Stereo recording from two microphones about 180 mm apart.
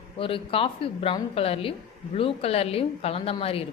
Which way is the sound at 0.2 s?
30° left (ahead or behind).